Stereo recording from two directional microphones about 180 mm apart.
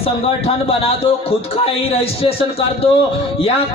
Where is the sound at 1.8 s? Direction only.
35° left (ahead or behind).